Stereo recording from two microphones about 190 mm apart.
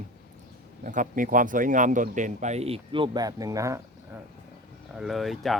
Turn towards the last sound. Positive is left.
turn(degrees=0)  # may be behind; listen again after turning